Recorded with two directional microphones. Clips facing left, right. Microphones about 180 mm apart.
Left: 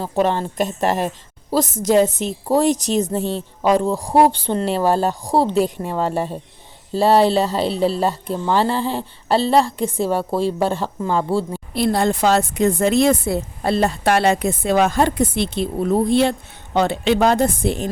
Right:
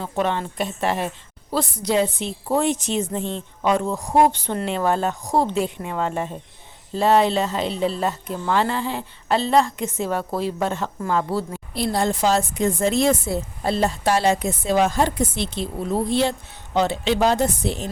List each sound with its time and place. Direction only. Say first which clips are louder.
0.0 s a woman's voice: left 4 dB; 35° left (ahead or behind)
11.7 s speech: left 4 dB; 60° left (ahead or behind)